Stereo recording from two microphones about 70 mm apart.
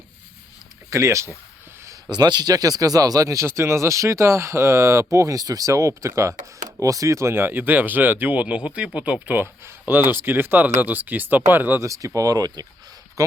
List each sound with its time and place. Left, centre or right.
0.9 s speech: right
2.0 s speech: right
11.8 s speech: right
13.2 s a sound: right